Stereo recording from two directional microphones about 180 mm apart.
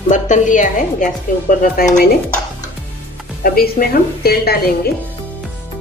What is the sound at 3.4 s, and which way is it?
A woman's voice, 55° left (ahead or behind).